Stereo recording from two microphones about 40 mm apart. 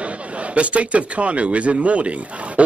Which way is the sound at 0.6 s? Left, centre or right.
Right.